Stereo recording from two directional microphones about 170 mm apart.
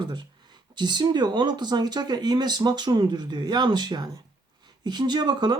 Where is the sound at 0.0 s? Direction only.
25° right (ahead or behind).